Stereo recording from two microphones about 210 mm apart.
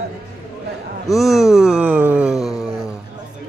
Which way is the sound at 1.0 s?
Centre (ahead or behind).